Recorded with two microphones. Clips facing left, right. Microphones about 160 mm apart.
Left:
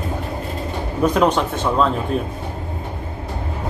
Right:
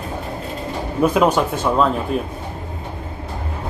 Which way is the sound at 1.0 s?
5° right (ahead or behind).